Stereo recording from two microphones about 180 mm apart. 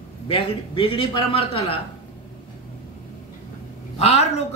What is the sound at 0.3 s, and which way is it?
A man's voice, 30° left (ahead or behind).